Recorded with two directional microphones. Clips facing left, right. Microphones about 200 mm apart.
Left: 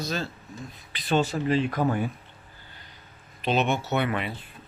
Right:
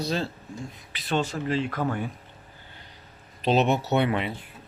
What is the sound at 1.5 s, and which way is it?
Speech, 15° left (ahead or behind).